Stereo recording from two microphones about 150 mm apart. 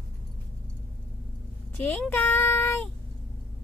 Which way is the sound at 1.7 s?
15° left (ahead or behind).